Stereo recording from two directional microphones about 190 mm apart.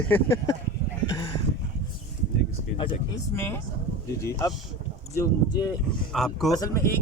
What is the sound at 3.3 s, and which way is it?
Speech, 10° left (ahead or behind).